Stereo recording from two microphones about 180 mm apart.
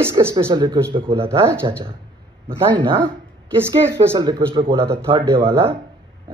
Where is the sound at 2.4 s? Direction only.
25° right (ahead or behind).